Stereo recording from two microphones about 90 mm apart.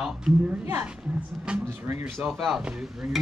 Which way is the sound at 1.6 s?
25° right (ahead or behind).